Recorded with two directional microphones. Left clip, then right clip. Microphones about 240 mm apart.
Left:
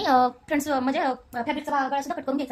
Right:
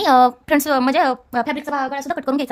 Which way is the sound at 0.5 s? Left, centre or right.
Right.